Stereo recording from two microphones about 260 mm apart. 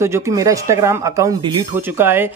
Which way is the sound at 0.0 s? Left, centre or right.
Centre.